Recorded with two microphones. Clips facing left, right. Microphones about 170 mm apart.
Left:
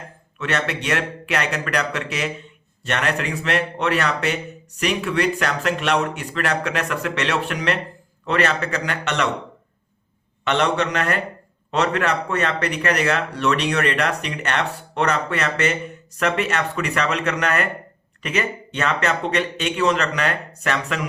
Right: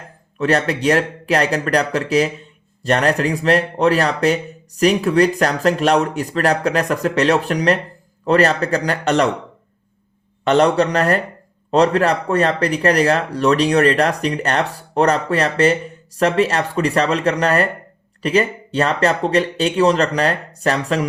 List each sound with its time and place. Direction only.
0.3 s speech: 35° right (ahead or behind)
10.4 s speech: 35° right (ahead or behind)